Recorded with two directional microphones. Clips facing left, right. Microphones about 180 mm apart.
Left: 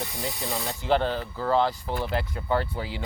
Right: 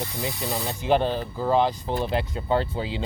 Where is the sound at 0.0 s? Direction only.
20° right (ahead or behind).